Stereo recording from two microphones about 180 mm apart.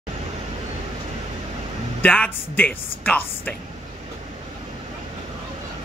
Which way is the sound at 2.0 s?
10° left (ahead or behind).